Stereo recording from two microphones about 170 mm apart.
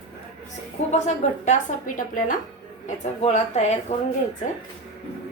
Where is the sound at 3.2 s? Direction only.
40° left (ahead or behind).